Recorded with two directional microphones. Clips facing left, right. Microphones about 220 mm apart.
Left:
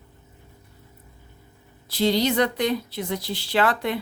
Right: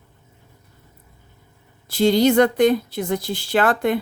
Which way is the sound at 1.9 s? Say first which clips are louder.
Right 6 dB; 50° right (ahead or behind).